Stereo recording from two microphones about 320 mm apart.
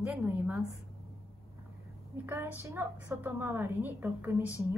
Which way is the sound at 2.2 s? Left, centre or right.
Centre.